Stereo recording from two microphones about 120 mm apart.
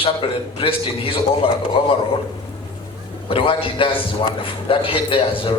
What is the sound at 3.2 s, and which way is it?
A man's voice, 50° left (ahead or behind).